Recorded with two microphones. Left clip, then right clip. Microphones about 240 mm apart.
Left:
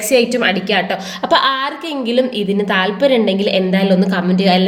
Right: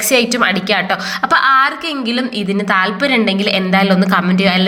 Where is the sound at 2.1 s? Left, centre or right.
Centre.